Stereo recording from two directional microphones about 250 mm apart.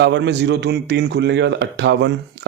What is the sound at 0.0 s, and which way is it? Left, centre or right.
Speech, right.